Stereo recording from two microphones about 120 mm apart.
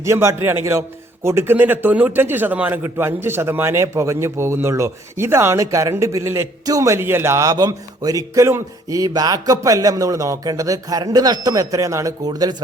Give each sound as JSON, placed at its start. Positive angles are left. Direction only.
{"t": 0.0, "sound": "a man's voice", "side_deg": -25}